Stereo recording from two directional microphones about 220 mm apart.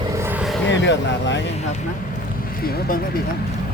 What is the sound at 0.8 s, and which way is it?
Speech, 55° left (ahead or behind).